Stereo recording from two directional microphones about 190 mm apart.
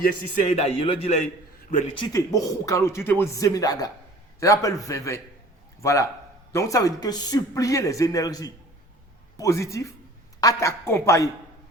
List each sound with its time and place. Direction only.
0.0 s a man's voice: 40° left (ahead or behind)
2.0 s a man's voice: 20° left (ahead or behind)